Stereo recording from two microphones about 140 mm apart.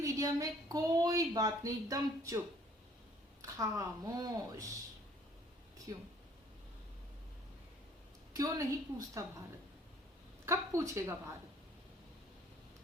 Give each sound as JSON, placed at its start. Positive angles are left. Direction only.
{"t": 0.0, "sound": "a woman's voice", "side_deg": -25}
{"t": 3.4, "sound": "a woman's voice", "side_deg": -20}
{"t": 5.9, "sound": "a woman's voice", "side_deg": -25}
{"t": 8.3, "sound": "a woman's voice", "side_deg": -25}
{"t": 10.4, "sound": "a woman's voice", "side_deg": -20}